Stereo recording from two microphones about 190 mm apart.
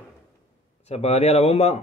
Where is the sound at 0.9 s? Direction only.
35° left (ahead or behind).